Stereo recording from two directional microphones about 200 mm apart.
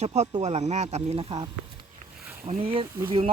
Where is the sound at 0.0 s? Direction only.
35° right (ahead or behind).